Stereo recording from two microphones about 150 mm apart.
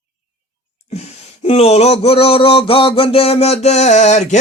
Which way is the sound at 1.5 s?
45° left (ahead or behind).